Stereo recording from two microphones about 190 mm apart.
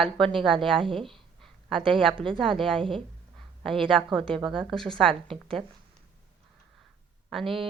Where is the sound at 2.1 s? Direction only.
25° right (ahead or behind).